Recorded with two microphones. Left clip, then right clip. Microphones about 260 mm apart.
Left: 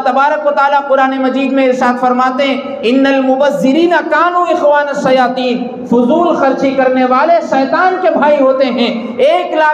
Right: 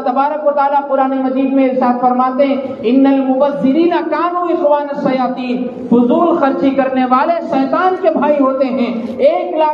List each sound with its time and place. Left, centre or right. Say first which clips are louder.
0.1 s speech: left 2 dB; left
6.4 s a man's voice: left 3 dB; left